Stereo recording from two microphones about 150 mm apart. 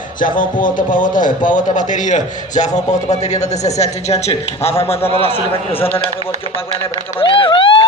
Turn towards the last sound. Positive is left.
turn(degrees=35)  # may be behind; listen again after turning